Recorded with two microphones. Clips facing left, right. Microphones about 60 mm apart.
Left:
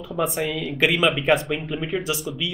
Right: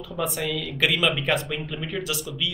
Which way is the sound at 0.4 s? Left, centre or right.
Centre.